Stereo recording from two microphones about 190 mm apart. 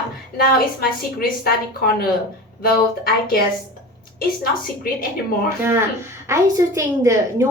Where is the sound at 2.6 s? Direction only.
50° left (ahead or behind).